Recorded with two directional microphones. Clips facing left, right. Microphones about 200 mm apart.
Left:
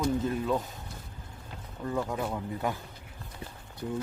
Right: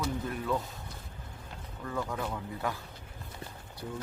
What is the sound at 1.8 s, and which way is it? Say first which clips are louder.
Speech: left 4 dB; 20° left (ahead or behind).